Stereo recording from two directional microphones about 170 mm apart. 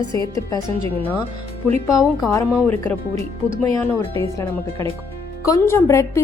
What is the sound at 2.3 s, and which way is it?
Speech, 15° left (ahead or behind).